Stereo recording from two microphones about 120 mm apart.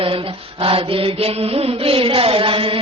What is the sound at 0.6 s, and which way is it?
Mantra, 50° right (ahead or behind).